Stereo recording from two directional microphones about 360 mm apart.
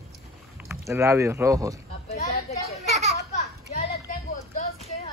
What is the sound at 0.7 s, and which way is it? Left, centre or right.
Speech, centre.